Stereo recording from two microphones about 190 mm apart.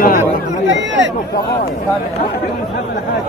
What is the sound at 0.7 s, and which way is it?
Speech, 75° right (ahead or behind).